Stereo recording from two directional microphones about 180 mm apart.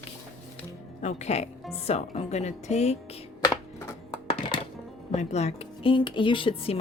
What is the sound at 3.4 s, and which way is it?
Computer keyboard, 20° left (ahead or behind).